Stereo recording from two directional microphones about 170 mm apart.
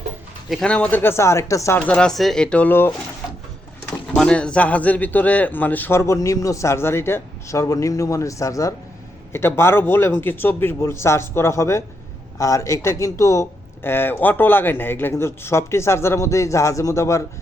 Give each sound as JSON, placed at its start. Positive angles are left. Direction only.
{"t": 0.5, "sound": "speech", "side_deg": 5}